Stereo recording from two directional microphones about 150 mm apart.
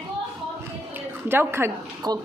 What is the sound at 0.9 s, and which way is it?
A woman's voice, 15° right (ahead or behind).